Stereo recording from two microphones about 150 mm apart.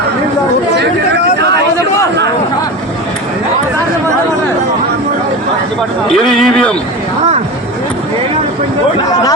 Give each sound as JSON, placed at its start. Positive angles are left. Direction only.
{"t": 6.1, "sound": "a man's voice", "side_deg": 0}